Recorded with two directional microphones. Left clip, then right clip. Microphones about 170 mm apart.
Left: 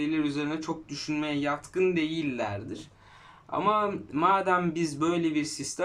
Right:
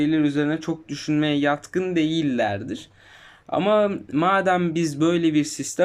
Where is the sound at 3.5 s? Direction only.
45° right (ahead or behind).